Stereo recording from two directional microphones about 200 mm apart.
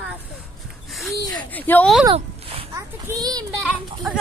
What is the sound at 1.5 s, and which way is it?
Speech, 10° left (ahead or behind).